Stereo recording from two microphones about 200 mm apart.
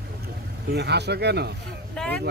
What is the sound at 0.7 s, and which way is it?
Speech, 55° right (ahead or behind).